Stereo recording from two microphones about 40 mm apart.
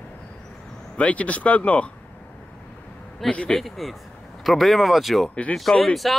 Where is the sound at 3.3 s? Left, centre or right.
Left.